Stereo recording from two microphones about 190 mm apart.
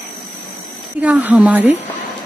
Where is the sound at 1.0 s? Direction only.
10° right (ahead or behind).